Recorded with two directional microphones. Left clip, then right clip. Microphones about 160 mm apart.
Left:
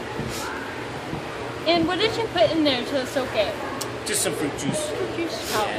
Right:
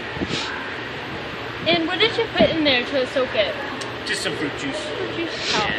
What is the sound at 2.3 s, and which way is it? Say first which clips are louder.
Speech: right 2 dB; 40° right (ahead or behind).